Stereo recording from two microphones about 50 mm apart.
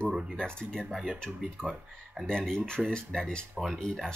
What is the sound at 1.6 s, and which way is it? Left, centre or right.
Speech, centre.